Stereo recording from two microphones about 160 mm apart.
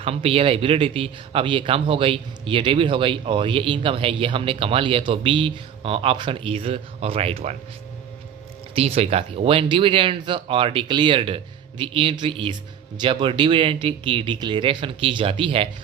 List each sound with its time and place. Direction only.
0.0 s speech: 40° right (ahead or behind)
8.7 s speech: 40° right (ahead or behind)